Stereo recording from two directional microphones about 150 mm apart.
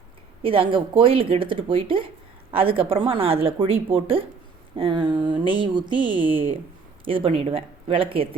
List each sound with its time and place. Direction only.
0.4 s speech: 35° right (ahead or behind)